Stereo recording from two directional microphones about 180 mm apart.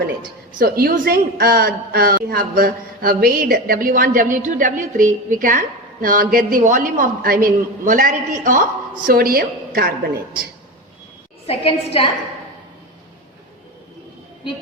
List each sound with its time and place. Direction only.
0.6 s a woman's voice: 55° right (ahead or behind)
11.4 s a woman's voice: 30° left (ahead or behind)